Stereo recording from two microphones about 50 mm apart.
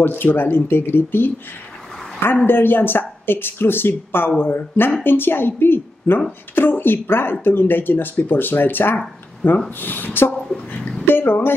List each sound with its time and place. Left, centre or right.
0.0 s speech: left
2.4 s speech: left
11.1 s a sound: left